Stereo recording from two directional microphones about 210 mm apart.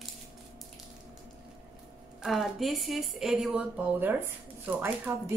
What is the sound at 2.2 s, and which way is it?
A woman's voice, centre (ahead or behind).